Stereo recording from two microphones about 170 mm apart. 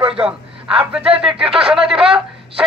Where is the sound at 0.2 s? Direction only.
5° right (ahead or behind).